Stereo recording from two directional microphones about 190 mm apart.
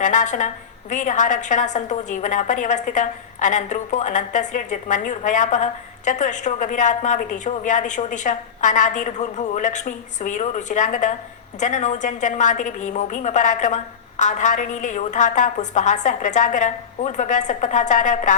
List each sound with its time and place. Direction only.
0.0 s a woman's voice: 40° left (ahead or behind)